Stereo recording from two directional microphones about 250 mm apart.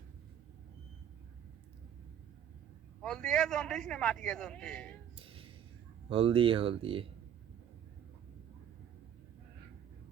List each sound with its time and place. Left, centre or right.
3.0 s a man's voice: centre
5.1 s a sound: right
6.1 s speech: right